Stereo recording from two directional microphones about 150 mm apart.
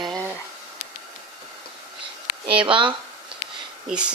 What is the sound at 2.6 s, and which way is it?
Speech, 35° right (ahead or behind).